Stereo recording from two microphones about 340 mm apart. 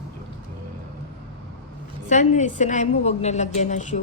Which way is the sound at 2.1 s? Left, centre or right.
Left.